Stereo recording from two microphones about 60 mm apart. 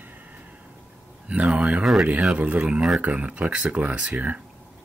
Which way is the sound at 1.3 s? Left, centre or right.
Centre.